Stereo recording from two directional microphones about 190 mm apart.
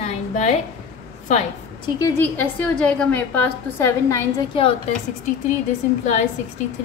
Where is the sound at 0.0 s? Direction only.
40° left (ahead or behind).